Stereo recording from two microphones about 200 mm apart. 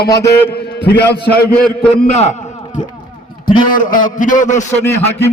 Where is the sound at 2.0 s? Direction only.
35° left (ahead or behind).